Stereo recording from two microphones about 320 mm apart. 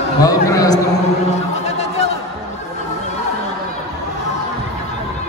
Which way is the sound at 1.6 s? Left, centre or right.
Left.